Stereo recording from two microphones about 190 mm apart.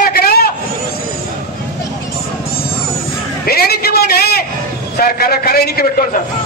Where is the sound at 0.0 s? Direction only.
55° left (ahead or behind).